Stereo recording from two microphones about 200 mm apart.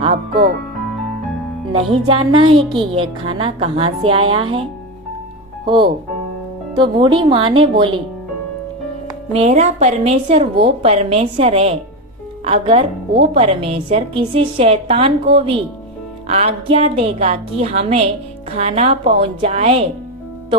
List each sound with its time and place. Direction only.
1.7 s a woman's voice: 25° right (ahead or behind)
5.6 s a woman's voice: 25° right (ahead or behind)
9.3 s a woman's voice: 35° right (ahead or behind)